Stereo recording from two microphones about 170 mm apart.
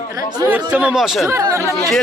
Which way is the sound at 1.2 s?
15° right (ahead or behind).